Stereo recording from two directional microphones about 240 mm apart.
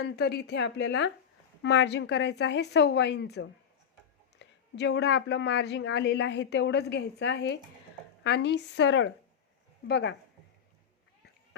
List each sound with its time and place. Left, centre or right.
0.2 s speech: left